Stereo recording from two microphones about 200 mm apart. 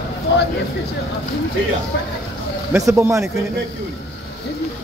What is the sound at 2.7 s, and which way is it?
Speech, 15° right (ahead or behind).